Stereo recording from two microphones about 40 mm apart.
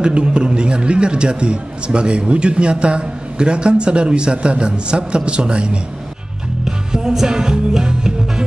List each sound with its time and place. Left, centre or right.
0.0 s a man's voice: right
6.6 s music: centre